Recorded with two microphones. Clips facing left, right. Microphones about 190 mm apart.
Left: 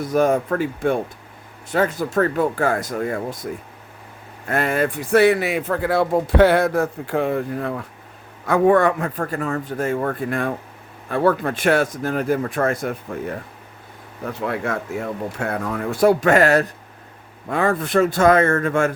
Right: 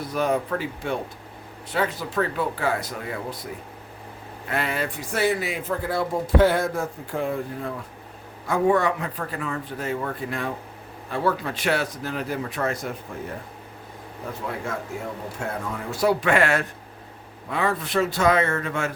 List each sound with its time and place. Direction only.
0.0 s a man's voice: 45° left (ahead or behind)
14.4 s a man's voice: 70° left (ahead or behind); by 18.9 s 50° left (ahead or behind)